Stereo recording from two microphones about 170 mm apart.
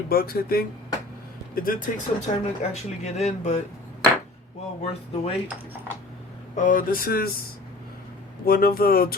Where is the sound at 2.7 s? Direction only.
40° left (ahead or behind).